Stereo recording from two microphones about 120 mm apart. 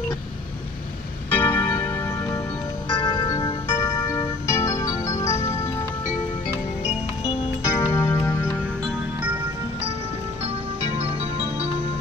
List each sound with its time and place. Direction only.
1.3 s keyboard: 15° left (ahead or behind)
1.8 s music: 20° left (ahead or behind)
2.9 s music: 40° left (ahead or behind)
7.6 s music: 25° left (ahead or behind)
10.4 s music: 60° right (ahead or behind)